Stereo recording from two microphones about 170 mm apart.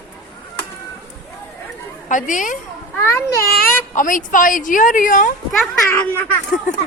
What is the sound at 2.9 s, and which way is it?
Speech, 15° left (ahead or behind).